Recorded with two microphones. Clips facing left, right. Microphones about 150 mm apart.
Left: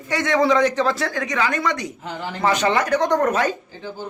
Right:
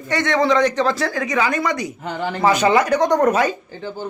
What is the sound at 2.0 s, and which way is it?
Speech, 60° right (ahead or behind).